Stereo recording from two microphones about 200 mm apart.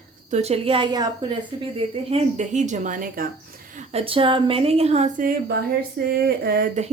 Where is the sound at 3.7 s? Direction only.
30° right (ahead or behind).